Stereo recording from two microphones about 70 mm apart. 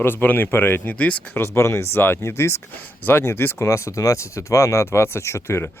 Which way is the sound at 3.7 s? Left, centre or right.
Left.